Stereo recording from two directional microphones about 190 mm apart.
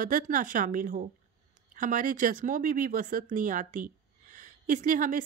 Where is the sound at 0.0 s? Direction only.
45° right (ahead or behind).